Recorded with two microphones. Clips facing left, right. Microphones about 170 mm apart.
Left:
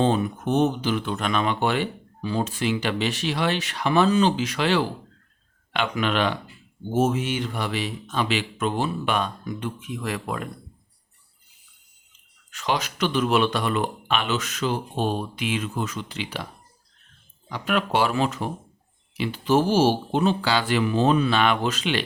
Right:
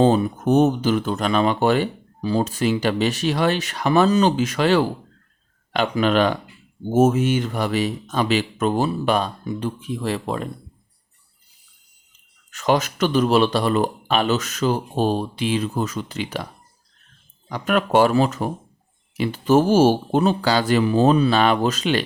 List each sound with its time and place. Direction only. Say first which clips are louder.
0.0 s speech: right 5 dB; 40° right (ahead or behind)
12.5 s speech: right 6 dB; 45° right (ahead or behind)
17.5 s speech: right 5 dB; 45° right (ahead or behind)